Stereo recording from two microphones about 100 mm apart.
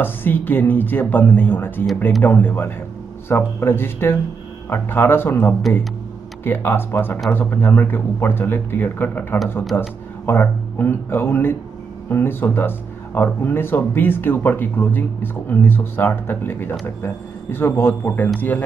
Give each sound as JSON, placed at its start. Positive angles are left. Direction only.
{"t": 0.0, "sound": "speech", "side_deg": 20}